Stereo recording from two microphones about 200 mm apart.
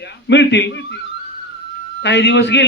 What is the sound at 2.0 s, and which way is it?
Speech, 60° left (ahead or behind).